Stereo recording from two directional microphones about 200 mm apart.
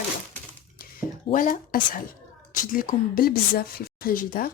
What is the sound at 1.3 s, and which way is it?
A woman's voice, 40° left (ahead or behind).